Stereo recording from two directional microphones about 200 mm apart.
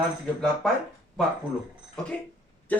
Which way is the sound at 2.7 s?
5° left (ahead or behind).